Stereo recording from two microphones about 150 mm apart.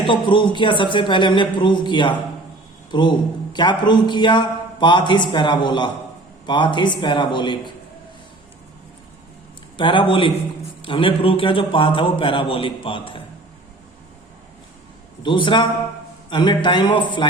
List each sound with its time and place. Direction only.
0.1 s a man's voice: 35° left (ahead or behind)
9.7 s a man's voice: 35° left (ahead or behind)
15.2 s a man's voice: 30° left (ahead or behind)